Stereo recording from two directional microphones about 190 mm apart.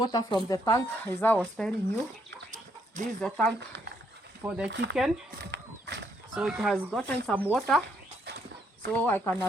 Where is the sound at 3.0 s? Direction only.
40° right (ahead or behind).